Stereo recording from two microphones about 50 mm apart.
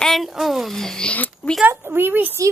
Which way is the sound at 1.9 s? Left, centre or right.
Right.